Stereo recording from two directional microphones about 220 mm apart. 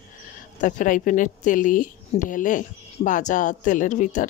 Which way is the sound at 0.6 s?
35° left (ahead or behind).